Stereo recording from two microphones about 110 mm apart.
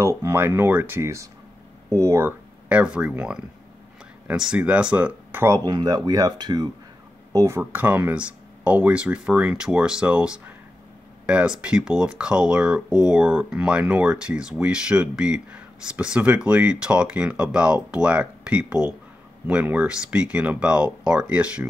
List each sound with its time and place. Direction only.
0.0 s speech: 25° right (ahead or behind)
2.7 s speech: 10° right (ahead or behind)
5.6 s speech: 40° right (ahead or behind)
7.3 s speech: 25° right (ahead or behind)
7.7 s speech: 15° right (ahead or behind)